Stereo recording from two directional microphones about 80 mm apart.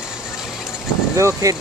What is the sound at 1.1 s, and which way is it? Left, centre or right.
Speech, right.